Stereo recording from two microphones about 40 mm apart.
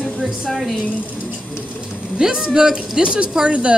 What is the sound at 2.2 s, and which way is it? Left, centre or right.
A man's voice, centre.